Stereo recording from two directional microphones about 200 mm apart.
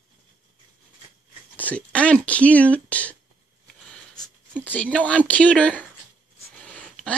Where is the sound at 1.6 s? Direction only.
5° left (ahead or behind).